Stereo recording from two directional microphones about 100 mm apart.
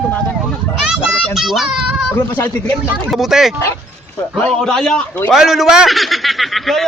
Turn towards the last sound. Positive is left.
turn(degrees=0)  # may be behind; listen again after turning